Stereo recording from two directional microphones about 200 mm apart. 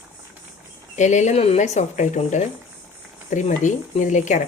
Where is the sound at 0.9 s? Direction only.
35° left (ahead or behind).